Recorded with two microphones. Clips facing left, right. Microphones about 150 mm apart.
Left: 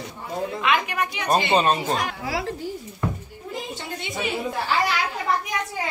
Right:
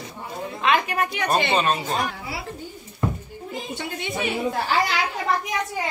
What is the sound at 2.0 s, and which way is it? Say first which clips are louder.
Speech: left 4 dB; 90° left.